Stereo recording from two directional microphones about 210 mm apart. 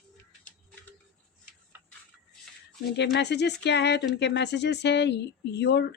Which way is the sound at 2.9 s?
55° left (ahead or behind).